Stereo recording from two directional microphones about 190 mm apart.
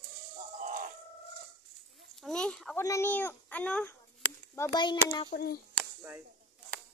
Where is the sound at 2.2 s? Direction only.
5° left (ahead or behind).